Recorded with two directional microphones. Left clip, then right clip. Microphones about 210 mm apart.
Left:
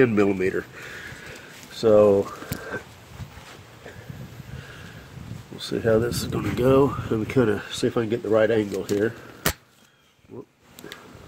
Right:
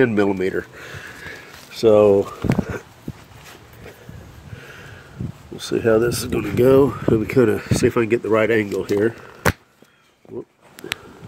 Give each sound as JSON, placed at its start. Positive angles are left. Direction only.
{"t": 0.0, "sound": "speech", "side_deg": -10}
{"t": 1.9, "sound": "speech", "side_deg": -40}
{"t": 5.7, "sound": "speech", "side_deg": -40}
{"t": 7.8, "sound": "speech", "side_deg": -45}